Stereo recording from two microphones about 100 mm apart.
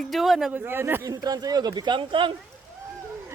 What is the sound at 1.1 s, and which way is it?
Speech, 40° right (ahead or behind).